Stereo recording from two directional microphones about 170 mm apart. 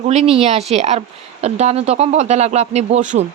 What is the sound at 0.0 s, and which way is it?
Speech, 40° right (ahead or behind).